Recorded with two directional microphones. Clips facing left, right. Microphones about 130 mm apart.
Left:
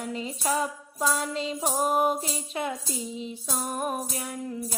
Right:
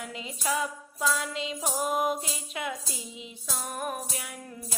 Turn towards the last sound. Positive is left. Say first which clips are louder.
# left 8 dB
turn(degrees=35)  # may be behind; listen again after turning